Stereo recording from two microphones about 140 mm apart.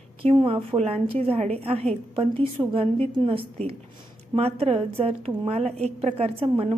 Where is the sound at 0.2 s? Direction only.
40° right (ahead or behind).